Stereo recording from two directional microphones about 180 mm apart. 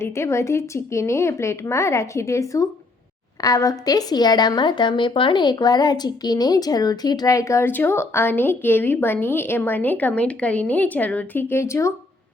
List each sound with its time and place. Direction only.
0.0 s speech: 15° left (ahead or behind)